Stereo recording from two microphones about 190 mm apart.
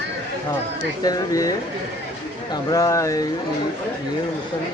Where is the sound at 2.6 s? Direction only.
15° left (ahead or behind).